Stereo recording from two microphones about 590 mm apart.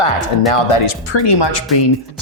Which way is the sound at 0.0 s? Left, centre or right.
Left.